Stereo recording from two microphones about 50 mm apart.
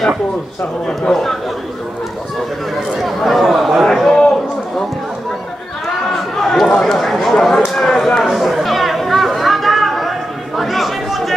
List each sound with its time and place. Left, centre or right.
0.8 s speech: centre
2.9 s chatter: centre
6.0 s chatter: centre
6.8 s a sound: centre